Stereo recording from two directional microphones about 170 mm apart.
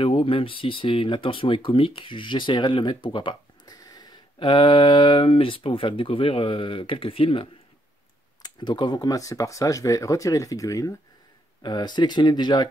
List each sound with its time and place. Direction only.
0.0 s speech: 30° left (ahead or behind)